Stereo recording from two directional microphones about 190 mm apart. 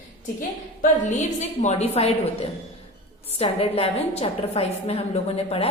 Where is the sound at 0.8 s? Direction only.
40° left (ahead or behind).